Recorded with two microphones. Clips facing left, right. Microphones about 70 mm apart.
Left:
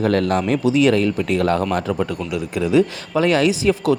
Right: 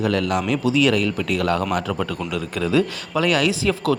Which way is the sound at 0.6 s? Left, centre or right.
Left.